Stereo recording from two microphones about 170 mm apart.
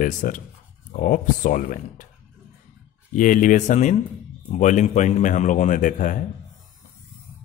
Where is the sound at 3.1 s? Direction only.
50° left (ahead or behind).